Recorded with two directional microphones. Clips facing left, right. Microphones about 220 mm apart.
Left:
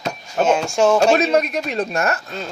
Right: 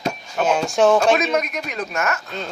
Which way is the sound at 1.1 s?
30° left (ahead or behind).